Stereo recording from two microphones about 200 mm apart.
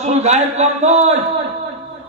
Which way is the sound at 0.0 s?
35° right (ahead or behind).